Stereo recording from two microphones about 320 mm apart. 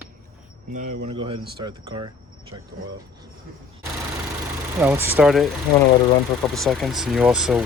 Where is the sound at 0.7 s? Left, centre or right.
Right.